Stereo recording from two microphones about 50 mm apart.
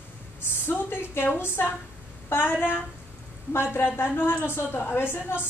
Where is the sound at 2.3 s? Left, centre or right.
Left.